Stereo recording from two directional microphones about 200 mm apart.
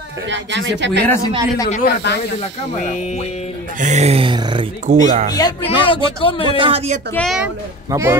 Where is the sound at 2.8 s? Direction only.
35° left (ahead or behind).